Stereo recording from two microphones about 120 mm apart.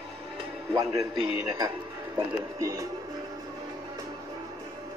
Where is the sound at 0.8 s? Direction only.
30° right (ahead or behind).